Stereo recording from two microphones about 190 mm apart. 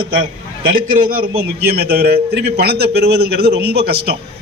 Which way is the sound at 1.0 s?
50° right (ahead or behind).